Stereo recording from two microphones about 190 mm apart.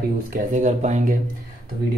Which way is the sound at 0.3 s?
40° right (ahead or behind).